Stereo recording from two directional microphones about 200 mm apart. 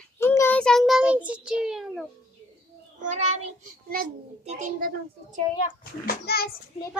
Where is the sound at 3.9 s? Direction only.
40° right (ahead or behind).